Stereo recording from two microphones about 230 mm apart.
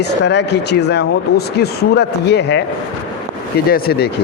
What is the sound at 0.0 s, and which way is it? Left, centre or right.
Speech, left.